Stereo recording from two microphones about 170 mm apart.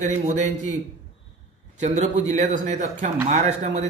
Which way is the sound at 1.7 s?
40° right (ahead or behind).